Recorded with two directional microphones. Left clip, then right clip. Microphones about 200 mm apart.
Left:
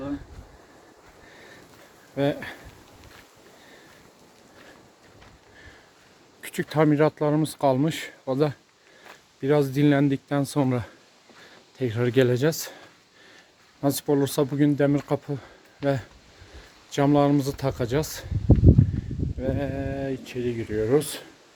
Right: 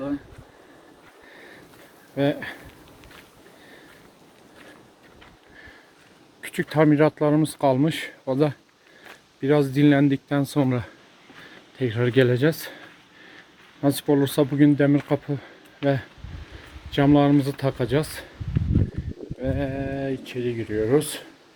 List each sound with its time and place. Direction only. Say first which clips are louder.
2.1 s speech: right 2 dB; centre (ahead or behind)
6.4 s speech: right 2 dB; centre (ahead or behind)
13.8 s speech: right 2 dB; 5° left (ahead or behind)
19.4 s speech: right 1 dB; centre (ahead or behind)